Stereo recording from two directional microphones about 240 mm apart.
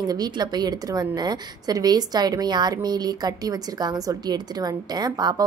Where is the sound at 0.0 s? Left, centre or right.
Centre.